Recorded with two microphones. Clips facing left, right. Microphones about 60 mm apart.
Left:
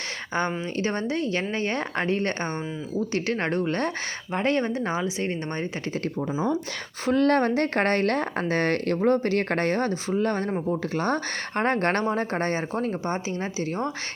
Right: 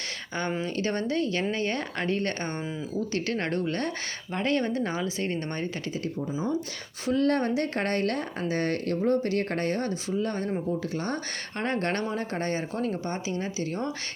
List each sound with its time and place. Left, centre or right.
0.6 s speech: left
7.1 s a woman's voice: left